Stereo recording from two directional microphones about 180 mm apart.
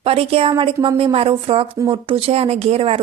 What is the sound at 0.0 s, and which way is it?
A woman's voice, 30° right (ahead or behind).